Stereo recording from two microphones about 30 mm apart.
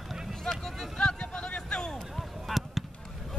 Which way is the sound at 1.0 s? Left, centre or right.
Left.